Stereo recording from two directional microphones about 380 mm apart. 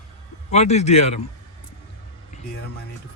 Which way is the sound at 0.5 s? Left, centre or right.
Centre.